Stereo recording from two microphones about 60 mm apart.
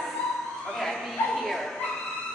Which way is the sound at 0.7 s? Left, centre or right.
Centre.